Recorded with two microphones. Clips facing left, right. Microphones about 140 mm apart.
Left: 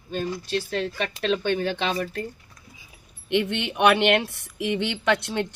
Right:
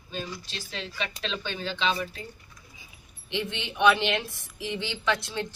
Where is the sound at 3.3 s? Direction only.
65° left (ahead or behind).